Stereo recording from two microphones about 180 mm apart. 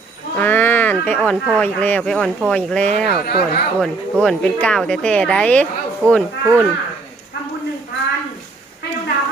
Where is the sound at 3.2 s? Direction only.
60° left (ahead or behind).